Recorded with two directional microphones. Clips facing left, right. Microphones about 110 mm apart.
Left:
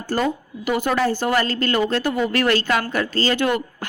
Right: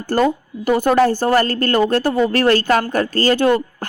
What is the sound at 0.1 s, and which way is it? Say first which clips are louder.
Speech: right 5 dB; 40° right (ahead or behind).